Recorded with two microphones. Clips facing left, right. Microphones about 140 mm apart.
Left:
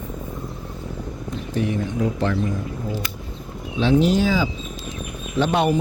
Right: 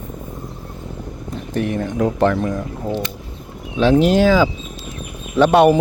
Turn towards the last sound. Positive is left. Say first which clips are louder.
# right 8 dB
turn(degrees=-65)  # may be behind; listen again after turning